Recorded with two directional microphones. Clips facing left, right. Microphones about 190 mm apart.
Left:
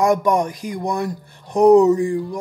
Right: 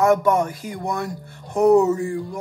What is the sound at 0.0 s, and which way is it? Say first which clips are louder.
Speech: even; 15° left (ahead or behind).